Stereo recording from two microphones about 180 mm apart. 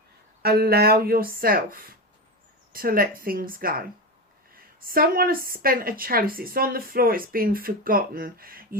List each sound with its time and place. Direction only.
0.4 s speech: 60° right (ahead or behind)